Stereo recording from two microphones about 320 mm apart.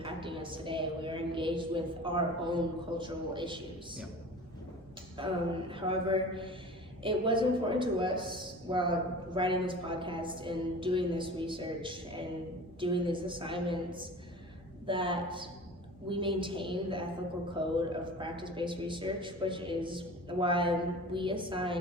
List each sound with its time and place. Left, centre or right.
0.0 s a man's voice: centre
5.2 s a man's voice: centre